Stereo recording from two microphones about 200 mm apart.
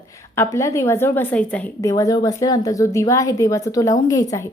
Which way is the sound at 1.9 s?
20° left (ahead or behind).